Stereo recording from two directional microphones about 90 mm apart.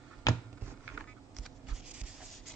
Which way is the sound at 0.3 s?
40° left (ahead or behind).